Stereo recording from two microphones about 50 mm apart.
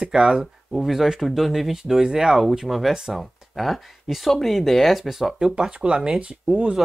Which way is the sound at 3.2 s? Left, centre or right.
Centre.